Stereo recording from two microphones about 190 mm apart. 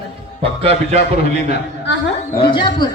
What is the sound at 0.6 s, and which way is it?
Speech, 30° right (ahead or behind).